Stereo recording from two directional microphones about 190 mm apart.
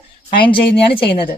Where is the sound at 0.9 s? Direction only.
30° left (ahead or behind).